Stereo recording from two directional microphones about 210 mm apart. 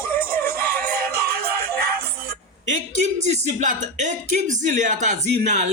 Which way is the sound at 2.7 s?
35° right (ahead or behind).